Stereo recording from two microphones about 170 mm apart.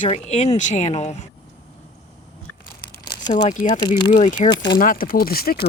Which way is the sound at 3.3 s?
45° left (ahead or behind).